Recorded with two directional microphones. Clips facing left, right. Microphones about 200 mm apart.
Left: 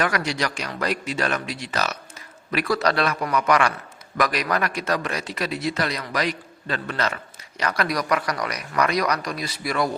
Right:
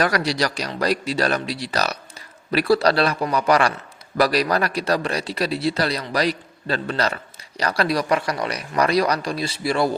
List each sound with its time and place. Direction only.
0.0 s a man's voice: 35° right (ahead or behind)